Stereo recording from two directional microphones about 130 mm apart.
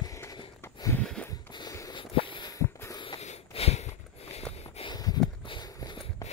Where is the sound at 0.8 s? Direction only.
25° left (ahead or behind).